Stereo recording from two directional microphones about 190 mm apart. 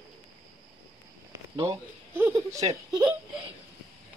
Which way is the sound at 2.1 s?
15° right (ahead or behind).